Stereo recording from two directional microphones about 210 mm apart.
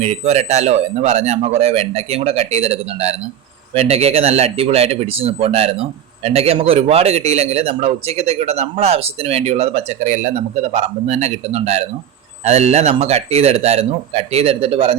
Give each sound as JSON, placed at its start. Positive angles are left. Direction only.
{"t": 0.0, "sound": "a man's voice", "side_deg": -30}